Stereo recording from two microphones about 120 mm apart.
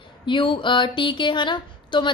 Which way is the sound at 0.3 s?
45° left (ahead or behind).